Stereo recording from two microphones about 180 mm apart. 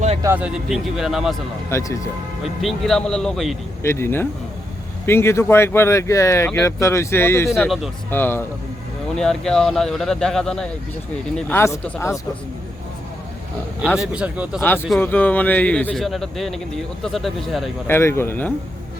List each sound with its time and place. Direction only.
0.2 s speech: 10° right (ahead or behind)
1.7 s speech: 15° left (ahead or behind)
2.4 s speech: centre (ahead or behind)
3.8 s speech: 15° left (ahead or behind)
13.8 s speech: 5° right (ahead or behind)
14.9 s speech: 10° left (ahead or behind)
17.8 s speech: 15° left (ahead or behind)